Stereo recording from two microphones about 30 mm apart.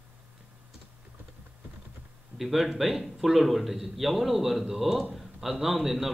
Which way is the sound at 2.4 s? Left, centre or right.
Centre.